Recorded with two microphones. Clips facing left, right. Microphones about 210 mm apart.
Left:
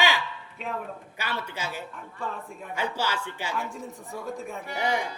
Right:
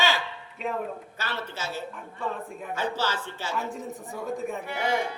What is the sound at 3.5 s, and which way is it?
A man's voice, centre (ahead or behind).